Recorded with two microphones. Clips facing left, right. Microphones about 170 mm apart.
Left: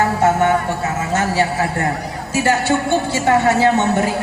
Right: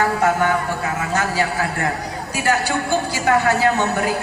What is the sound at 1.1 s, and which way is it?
A man's voice, 25° left (ahead or behind).